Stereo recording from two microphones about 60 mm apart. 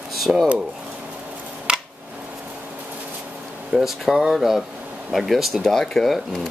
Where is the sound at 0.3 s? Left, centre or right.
Centre.